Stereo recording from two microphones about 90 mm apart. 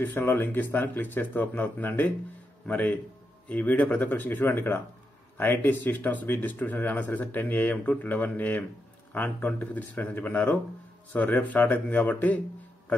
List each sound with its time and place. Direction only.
0.0 s speech: 20° left (ahead or behind)